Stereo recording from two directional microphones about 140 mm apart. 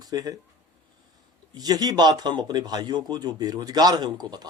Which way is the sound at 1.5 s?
30° right (ahead or behind).